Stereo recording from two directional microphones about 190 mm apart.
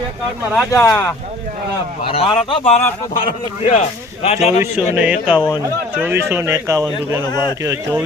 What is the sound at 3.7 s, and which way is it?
Speech, 35° left (ahead or behind).